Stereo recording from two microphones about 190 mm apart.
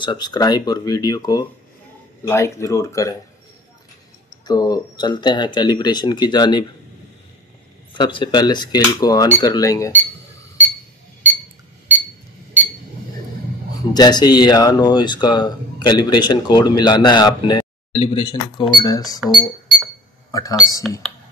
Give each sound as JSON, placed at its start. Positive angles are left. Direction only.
{"t": 0.0, "sound": "speech", "side_deg": 25}
{"t": 4.5, "sound": "speech", "side_deg": 20}
{"t": 7.9, "sound": "speech", "side_deg": 25}
{"t": 13.9, "sound": "speech", "side_deg": 20}
{"t": 19.1, "sound": "speech", "side_deg": 0}
{"t": 20.2, "sound": "a sound", "side_deg": 15}